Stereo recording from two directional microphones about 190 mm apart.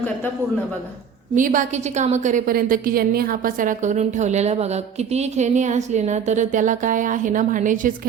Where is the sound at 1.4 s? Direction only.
45° right (ahead or behind).